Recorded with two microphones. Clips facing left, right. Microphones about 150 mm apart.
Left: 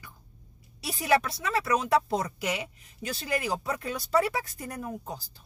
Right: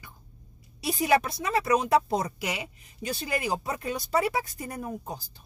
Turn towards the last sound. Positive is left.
turn(degrees=-25)  # may be behind; listen again after turning